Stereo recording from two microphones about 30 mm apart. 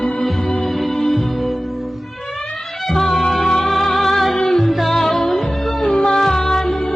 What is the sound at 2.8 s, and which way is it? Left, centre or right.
Music, centre.